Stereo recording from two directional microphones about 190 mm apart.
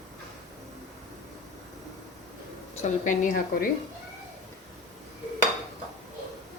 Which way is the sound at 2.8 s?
40° left (ahead or behind).